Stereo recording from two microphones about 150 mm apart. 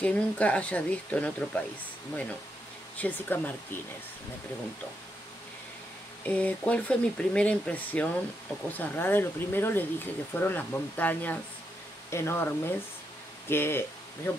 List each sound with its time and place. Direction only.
0.0 s speech: 10° left (ahead or behind)
3.0 s speech: 10° left (ahead or behind)
6.2 s speech: 10° left (ahead or behind)